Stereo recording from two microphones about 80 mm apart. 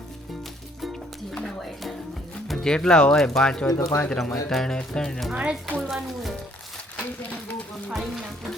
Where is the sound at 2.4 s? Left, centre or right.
Centre.